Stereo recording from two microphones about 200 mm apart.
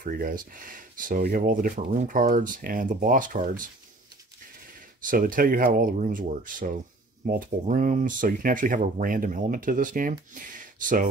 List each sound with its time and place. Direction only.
0.0 s speech: 45° right (ahead or behind)
5.0 s speech: 45° right (ahead or behind)
10.6 s a sound: 40° right (ahead or behind)